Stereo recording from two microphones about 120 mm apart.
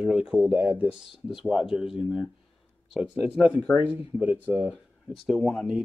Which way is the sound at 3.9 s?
15° right (ahead or behind).